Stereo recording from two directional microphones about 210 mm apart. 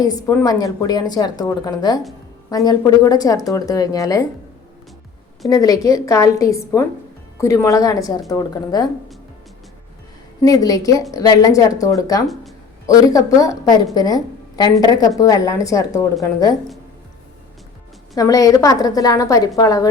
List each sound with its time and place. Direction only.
0.0 s a woman's voice: 15° left (ahead or behind)
5.5 s a woman's voice: 15° left (ahead or behind)
10.4 s a woman's voice: 15° left (ahead or behind)
18.1 s a woman's voice: 15° left (ahead or behind)